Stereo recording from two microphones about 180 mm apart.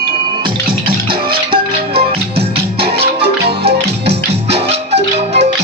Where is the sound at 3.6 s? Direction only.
65° right (ahead or behind).